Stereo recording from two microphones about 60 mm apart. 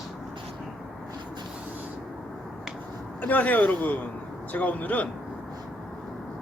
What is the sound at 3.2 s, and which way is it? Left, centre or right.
Speech, left.